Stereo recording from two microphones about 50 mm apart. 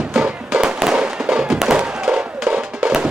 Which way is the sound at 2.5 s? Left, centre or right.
Right.